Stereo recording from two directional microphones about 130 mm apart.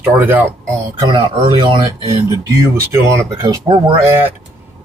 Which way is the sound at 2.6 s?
20° right (ahead or behind).